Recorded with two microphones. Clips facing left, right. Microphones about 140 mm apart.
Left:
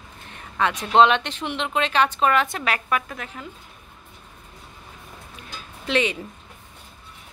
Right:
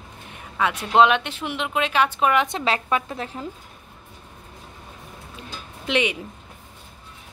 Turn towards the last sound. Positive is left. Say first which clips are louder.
# even
turn(degrees=-15)  # may be behind; listen again after turning